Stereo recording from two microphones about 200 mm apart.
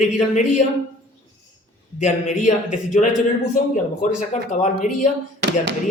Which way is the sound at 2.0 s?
35° left (ahead or behind).